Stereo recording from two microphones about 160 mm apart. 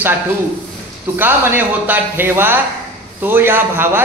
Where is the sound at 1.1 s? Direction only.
15° right (ahead or behind).